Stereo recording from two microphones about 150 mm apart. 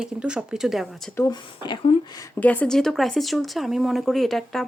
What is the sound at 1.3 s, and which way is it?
Speech, 30° left (ahead or behind).